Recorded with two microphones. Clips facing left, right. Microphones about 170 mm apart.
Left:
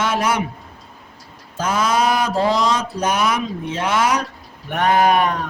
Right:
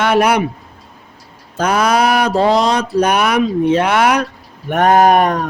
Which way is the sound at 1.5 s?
65° right (ahead or behind).